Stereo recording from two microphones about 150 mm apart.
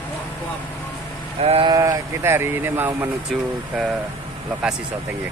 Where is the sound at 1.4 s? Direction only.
40° right (ahead or behind).